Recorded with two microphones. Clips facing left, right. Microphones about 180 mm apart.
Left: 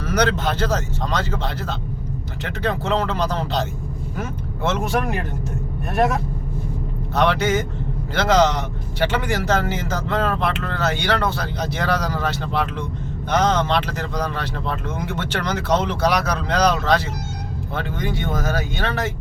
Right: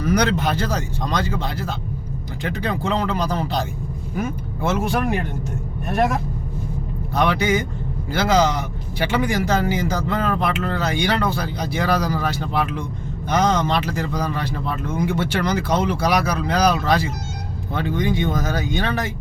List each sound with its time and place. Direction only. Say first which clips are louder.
0.0 s speech: right 1 dB; 10° right (ahead or behind)
7.2 s speech: even; 10° right (ahead or behind)